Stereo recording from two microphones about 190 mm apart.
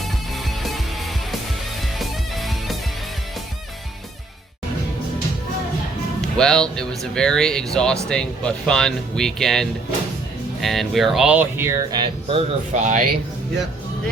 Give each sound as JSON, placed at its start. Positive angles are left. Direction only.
{"t": 0.0, "sound": "music", "side_deg": 0}
{"t": 2.0, "sound": "music", "side_deg": 0}
{"t": 6.3, "sound": "speech", "side_deg": 5}
{"t": 12.8, "sound": "speech", "side_deg": -40}